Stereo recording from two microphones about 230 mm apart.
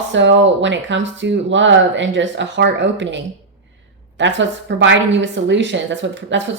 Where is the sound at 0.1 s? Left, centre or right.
Right.